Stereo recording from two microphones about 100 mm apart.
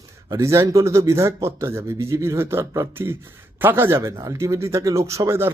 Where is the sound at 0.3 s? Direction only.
30° right (ahead or behind).